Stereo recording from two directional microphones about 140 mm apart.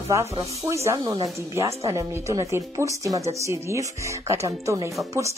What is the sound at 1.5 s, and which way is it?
Speech, 20° right (ahead or behind).